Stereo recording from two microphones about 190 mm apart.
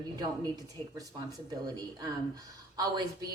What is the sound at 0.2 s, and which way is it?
A woman's voice, 20° right (ahead or behind).